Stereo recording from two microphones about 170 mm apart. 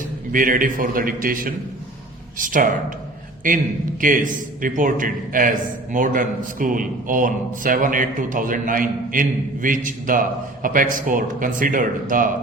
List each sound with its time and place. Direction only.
0.3 s a man's voice: 55° right (ahead or behind)